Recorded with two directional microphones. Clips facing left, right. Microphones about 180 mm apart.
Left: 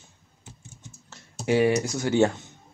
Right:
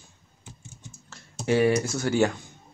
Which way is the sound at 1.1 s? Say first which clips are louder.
Even; 20° left (ahead or behind).